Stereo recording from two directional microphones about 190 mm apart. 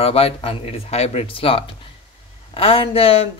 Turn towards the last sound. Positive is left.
turn(degrees=30)  # may be behind; listen again after turning